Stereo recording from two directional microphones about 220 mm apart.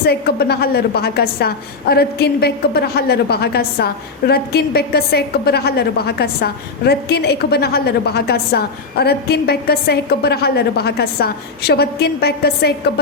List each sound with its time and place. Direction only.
0.0 s a woman's voice: 45° left (ahead or behind)